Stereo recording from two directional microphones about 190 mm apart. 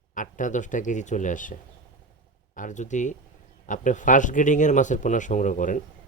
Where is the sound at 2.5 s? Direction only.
40° left (ahead or behind).